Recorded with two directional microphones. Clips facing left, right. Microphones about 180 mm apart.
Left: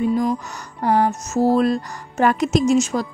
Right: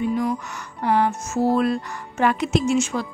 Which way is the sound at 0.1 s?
35° left (ahead or behind).